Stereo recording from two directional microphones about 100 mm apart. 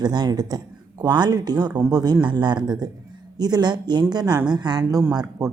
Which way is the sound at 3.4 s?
45° right (ahead or behind).